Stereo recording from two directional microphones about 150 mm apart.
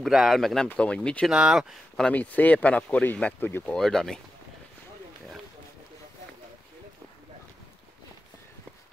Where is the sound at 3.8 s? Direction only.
5° left (ahead or behind).